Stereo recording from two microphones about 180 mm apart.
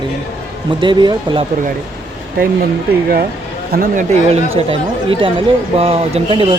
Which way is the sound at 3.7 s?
50° right (ahead or behind).